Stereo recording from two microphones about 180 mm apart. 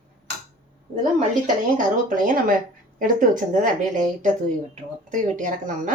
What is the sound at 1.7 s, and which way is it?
Speech, 50° right (ahead or behind).